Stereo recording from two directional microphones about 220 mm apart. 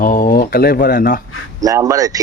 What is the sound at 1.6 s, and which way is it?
Speech, 15° right (ahead or behind).